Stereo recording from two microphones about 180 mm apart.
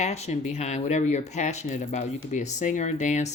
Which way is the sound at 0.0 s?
35° left (ahead or behind).